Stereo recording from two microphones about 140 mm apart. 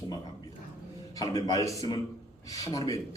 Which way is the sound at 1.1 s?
25° left (ahead or behind).